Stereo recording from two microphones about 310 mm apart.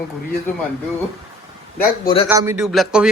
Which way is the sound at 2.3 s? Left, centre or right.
Centre.